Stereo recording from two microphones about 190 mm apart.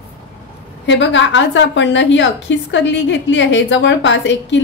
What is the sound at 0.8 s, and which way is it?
A woman's voice, 70° left (ahead or behind).